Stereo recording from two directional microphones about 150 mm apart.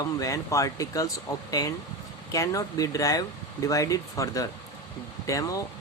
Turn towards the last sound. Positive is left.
turn(degrees=20)  # may be behind; listen again after turning